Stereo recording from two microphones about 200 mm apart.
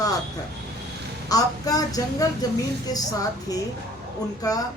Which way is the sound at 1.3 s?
20° left (ahead or behind).